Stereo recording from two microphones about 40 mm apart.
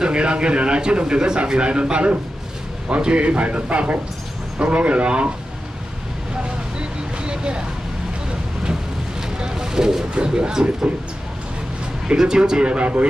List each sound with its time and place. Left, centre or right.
0.0 s a man's voice: right
6.8 s vehicle: right
9.4 s a sound: centre
10.1 s a man's voice: right
12.2 s a man's voice: centre